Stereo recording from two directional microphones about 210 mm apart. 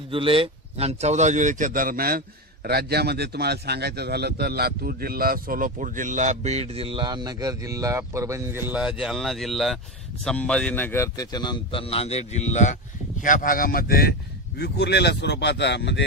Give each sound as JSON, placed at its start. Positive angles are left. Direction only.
{"t": 0.1, "sound": "a man's voice", "side_deg": -25}